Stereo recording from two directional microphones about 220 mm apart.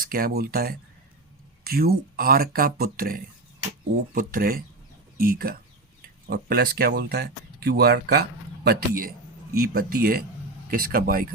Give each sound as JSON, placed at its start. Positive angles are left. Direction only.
{"t": 0.0, "sound": "speech", "side_deg": -40}